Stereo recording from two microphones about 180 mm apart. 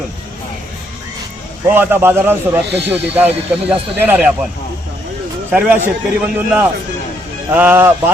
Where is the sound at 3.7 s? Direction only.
10° right (ahead or behind).